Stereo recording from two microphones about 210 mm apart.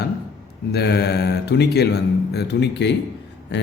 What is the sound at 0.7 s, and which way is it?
Speech, 50° left (ahead or behind).